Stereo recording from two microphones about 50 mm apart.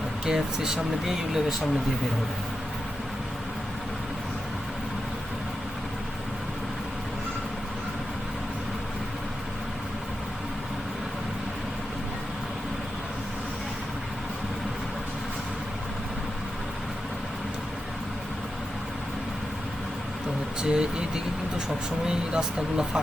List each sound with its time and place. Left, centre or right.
0.3 s speech: centre
20.6 s speech: centre
22.0 s speech: centre